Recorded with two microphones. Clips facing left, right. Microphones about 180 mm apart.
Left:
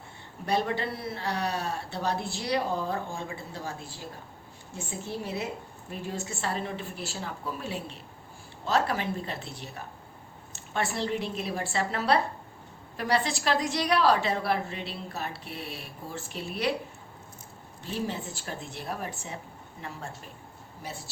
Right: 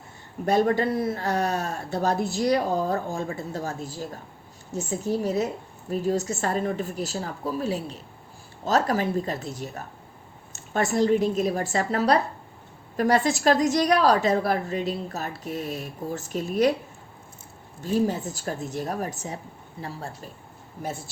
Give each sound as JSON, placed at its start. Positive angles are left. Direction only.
{"t": 0.4, "sound": "a woman's voice", "side_deg": -45}
{"t": 17.8, "sound": "speech", "side_deg": -45}
{"t": 20.8, "sound": "speech", "side_deg": -50}